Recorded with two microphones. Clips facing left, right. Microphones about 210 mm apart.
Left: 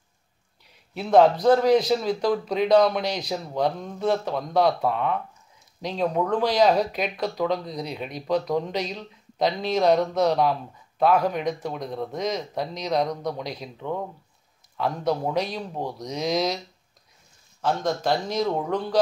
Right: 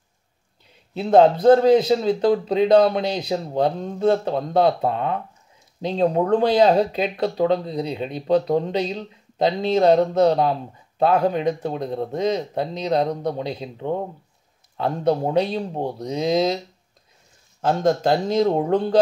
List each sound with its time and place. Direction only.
0.9 s speech: 25° right (ahead or behind)
17.6 s speech: 25° right (ahead or behind)